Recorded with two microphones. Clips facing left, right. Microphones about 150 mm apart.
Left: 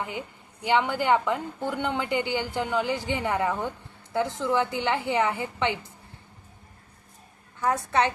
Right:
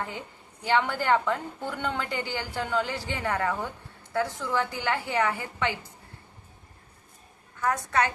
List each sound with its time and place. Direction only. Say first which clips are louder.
0.6 s a woman's voice: left 2 dB; 15° left (ahead or behind)
7.6 s a woman's voice: left 2 dB; 25° left (ahead or behind)